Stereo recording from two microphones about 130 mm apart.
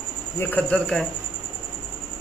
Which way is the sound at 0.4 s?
10° left (ahead or behind).